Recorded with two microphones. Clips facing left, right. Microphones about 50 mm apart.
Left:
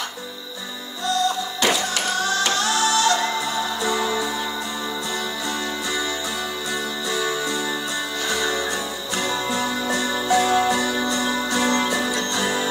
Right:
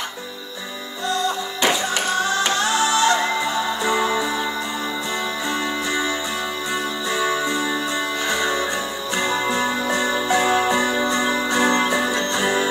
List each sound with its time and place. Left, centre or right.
1.0 s music: right
7.1 s music: right